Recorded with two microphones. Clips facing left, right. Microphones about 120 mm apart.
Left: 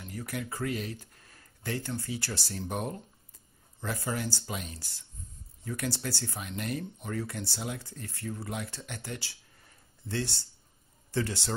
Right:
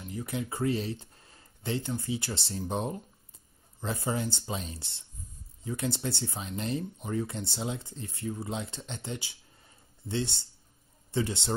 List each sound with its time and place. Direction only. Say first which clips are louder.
0.0 s speech: right 2 dB; 20° right (ahead or behind)